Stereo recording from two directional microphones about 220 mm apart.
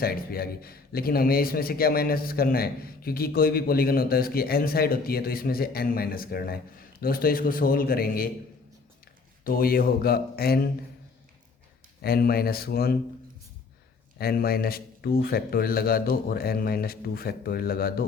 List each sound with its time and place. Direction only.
0.0 s a man's voice: 45° left (ahead or behind)
9.4 s a man's voice: 40° left (ahead or behind)
12.0 s a man's voice: 45° left (ahead or behind)
14.2 s a man's voice: 45° left (ahead or behind)